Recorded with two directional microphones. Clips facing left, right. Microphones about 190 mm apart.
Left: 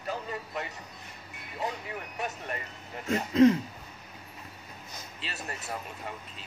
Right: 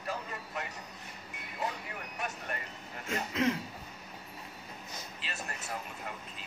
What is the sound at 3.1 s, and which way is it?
Speech, 35° left (ahead or behind).